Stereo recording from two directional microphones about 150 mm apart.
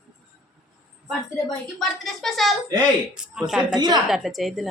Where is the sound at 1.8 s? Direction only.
Centre (ahead or behind).